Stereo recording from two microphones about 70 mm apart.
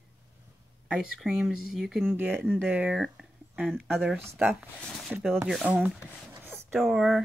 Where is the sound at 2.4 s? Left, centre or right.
Right.